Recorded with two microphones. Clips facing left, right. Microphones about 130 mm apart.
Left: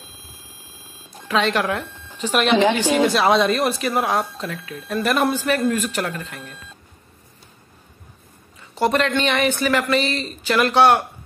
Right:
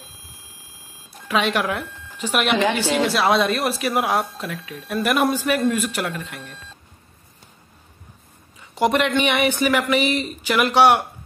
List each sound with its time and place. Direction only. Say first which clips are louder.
1.2 s speech: left 1 dB; 10° right (ahead or behind)
2.5 s speech: left 4 dB; 15° left (ahead or behind)
3.1 s speech: left 2 dB; centre (ahead or behind)
6.4 s speech: left 1 dB; 10° left (ahead or behind)
8.7 s speech: even; 15° right (ahead or behind)